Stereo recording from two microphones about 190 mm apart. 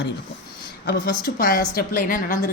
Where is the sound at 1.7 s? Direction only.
50° left (ahead or behind).